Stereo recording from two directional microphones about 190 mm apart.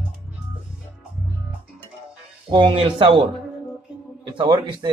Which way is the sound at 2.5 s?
25° right (ahead or behind).